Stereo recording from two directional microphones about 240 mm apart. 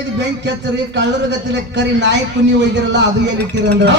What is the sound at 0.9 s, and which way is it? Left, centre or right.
A man's voice, right.